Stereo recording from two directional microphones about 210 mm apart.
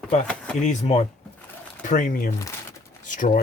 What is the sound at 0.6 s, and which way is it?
A man's voice, 35° left (ahead or behind).